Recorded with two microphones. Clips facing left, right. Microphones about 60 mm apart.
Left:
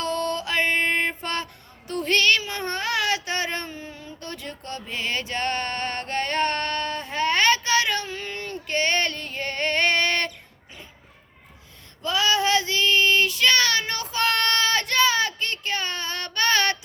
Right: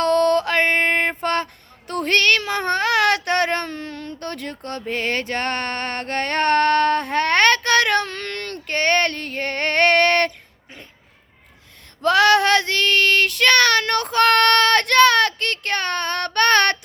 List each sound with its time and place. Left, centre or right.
0.0 s mantra: right
1.9 s child singing: right
12.0 s child singing: right